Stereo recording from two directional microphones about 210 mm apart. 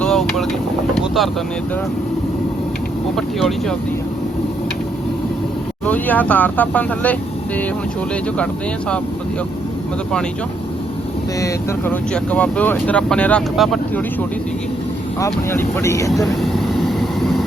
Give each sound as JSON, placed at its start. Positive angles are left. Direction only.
{"t": 0.0, "sound": "vehicle", "side_deg": 0}
{"t": 0.9, "sound": "boat", "side_deg": 0}
{"t": 3.2, "sound": "speech", "side_deg": 0}
{"t": 5.8, "sound": "speech", "side_deg": 5}
{"t": 11.3, "sound": "speech", "side_deg": 15}
{"t": 15.2, "sound": "speech", "side_deg": 10}
{"t": 16.4, "sound": "vehicle", "side_deg": 0}